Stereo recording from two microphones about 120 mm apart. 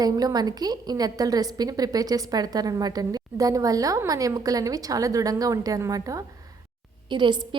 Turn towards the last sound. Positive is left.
turn(degrees=-40)  # may be behind; listen again after turning